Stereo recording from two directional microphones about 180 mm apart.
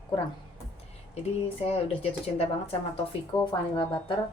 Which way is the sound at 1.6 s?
35° left (ahead or behind).